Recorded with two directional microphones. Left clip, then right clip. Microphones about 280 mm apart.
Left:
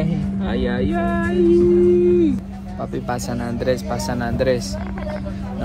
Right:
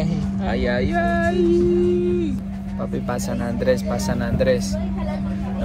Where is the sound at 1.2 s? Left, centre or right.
Centre.